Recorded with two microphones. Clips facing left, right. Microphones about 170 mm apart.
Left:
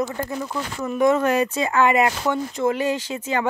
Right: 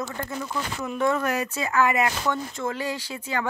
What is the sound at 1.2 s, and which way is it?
Speech, 30° left (ahead or behind).